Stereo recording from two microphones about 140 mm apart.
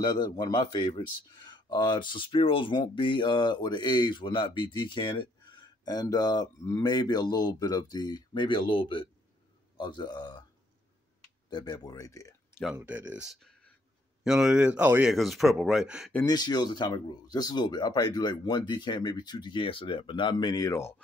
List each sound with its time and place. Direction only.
0.0 s speech: 30° left (ahead or behind)
11.5 s speech: 30° left (ahead or behind)
12.7 s speech: 10° right (ahead or behind)
15.0 s speech: centre (ahead or behind)
16.3 s speech: 30° left (ahead or behind)